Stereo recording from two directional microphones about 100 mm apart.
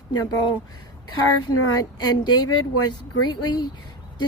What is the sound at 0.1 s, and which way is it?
Speech, 40° left (ahead or behind).